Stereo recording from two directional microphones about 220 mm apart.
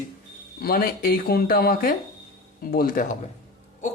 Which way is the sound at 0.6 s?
45° left (ahead or behind).